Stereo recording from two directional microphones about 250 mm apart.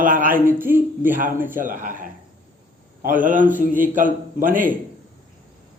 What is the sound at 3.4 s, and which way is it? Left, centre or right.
Speech, centre.